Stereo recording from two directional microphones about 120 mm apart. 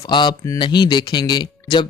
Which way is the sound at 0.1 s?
40° left (ahead or behind).